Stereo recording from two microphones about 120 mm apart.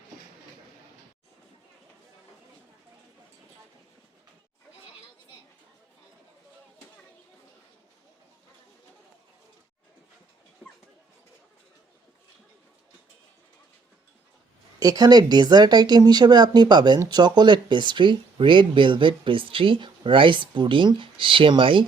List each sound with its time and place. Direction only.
14.8 s speech: 30° right (ahead or behind)